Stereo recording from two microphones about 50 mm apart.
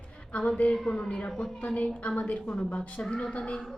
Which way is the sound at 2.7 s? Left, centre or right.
Left.